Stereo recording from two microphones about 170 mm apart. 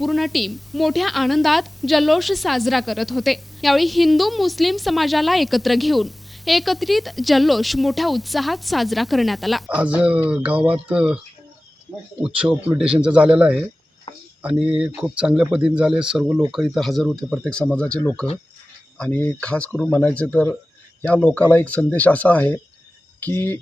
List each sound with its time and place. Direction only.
0.0 s a woman's voice: centre (ahead or behind)
12.2 s speech: 5° right (ahead or behind)
14.1 s a sound: 30° left (ahead or behind)
14.4 s a woman's voice: 5° right (ahead or behind); by 23.6 s 15° left (ahead or behind)